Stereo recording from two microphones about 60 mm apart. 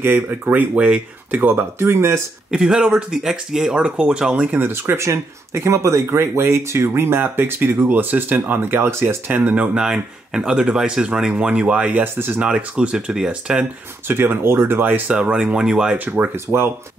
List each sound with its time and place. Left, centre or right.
0.0 s speech: right
0.5 s speech: right
1.3 s speech: right
2.5 s speech: centre
4.6 s speech: right
9.3 s speech: right
9.8 s speech: centre
12.0 s speech: right
12.4 s speech: centre
14.0 s speech: right
14.9 s speech: right
15.1 s speech: centre
16.3 s speech: right